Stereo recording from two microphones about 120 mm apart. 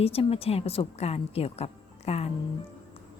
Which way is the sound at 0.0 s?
55° left (ahead or behind).